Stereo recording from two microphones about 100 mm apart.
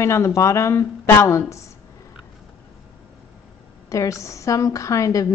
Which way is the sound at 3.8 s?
30° left (ahead or behind).